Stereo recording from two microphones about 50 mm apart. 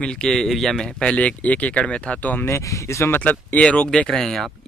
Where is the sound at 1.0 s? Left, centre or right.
Left.